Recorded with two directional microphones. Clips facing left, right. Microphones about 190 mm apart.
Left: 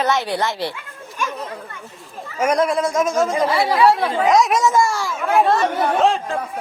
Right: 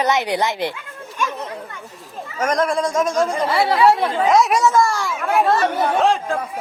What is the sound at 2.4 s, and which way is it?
Speech, 10° left (ahead or behind).